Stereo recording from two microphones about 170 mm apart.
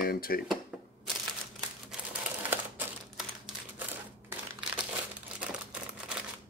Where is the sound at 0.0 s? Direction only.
60° left (ahead or behind).